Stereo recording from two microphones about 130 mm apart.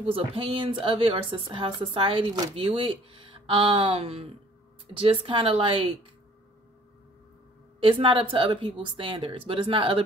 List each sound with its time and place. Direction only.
0.0 s a woman's voice: 45° right (ahead or behind)
7.8 s speech: 40° right (ahead or behind)